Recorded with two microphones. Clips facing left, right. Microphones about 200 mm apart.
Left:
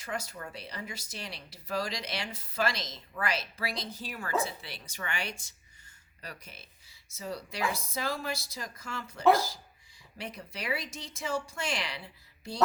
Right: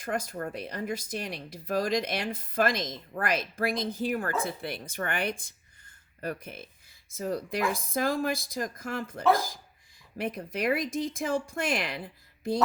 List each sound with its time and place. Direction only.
0.0 s speech: 50° right (ahead or behind)